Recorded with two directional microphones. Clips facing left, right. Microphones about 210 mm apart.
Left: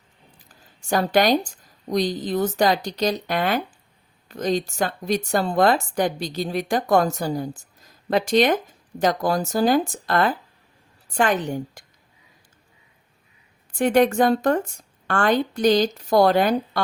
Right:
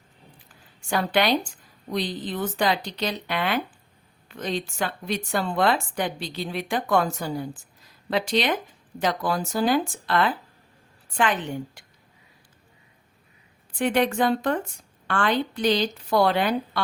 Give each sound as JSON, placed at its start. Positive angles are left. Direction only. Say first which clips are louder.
{"t": 0.4, "sound": "a woman's voice", "louder": "left 5 dB", "side_deg": 40}
{"t": 13.7, "sound": "a woman's voice", "louder": "left 5 dB", "side_deg": 45}